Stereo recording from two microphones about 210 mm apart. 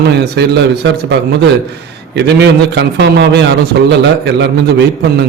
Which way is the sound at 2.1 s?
55° right (ahead or behind).